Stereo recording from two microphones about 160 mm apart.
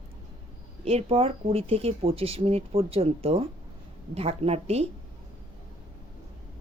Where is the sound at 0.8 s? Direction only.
40° right (ahead or behind).